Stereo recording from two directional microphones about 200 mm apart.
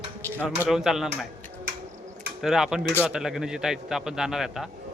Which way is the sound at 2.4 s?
Centre (ahead or behind).